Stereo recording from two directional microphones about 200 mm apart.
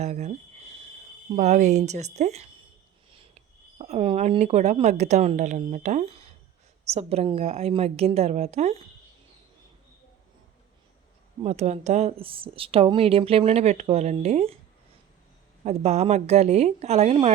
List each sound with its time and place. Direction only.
0.0 s speech: 35° right (ahead or behind)
1.4 s speech: 35° right (ahead or behind)
11.4 s speech: 35° right (ahead or behind)
15.6 s speech: 35° right (ahead or behind)